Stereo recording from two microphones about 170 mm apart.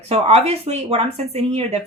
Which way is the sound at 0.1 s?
35° right (ahead or behind).